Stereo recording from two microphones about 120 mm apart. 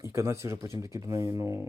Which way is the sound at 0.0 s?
25° right (ahead or behind).